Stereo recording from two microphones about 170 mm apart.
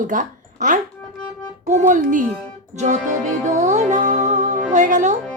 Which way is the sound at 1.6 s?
45° right (ahead or behind).